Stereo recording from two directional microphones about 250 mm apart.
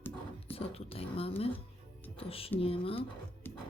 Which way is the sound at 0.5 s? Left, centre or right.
Left.